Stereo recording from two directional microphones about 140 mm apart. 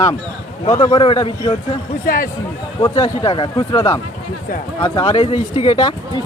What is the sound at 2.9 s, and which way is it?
A man's voice, 35° left (ahead or behind).